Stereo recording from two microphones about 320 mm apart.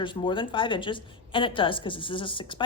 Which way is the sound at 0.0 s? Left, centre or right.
Centre.